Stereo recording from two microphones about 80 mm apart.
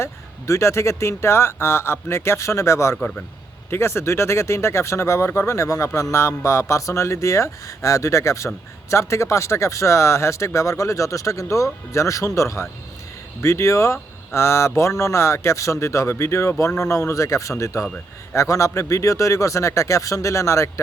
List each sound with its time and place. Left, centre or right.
0.0 s speech: left